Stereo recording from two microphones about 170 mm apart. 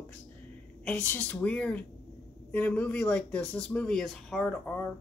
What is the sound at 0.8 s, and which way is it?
Speech, 10° left (ahead or behind).